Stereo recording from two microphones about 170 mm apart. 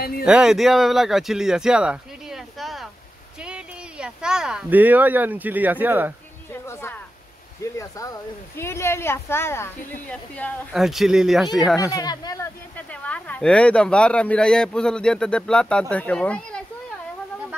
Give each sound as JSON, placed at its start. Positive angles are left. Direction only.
{"t": 0.2, "sound": "speech", "side_deg": -5}
{"t": 6.5, "sound": "a sound", "side_deg": 15}
{"t": 7.8, "sound": "speech", "side_deg": 20}
{"t": 10.7, "sound": "speech", "side_deg": 0}
{"t": 11.8, "sound": "speech", "side_deg": 20}
{"t": 12.7, "sound": "speech", "side_deg": 10}